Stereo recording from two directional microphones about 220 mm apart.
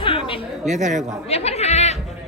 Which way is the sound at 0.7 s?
35° right (ahead or behind).